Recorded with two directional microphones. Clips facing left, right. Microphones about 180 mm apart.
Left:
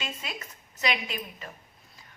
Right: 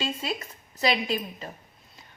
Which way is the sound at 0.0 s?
30° right (ahead or behind).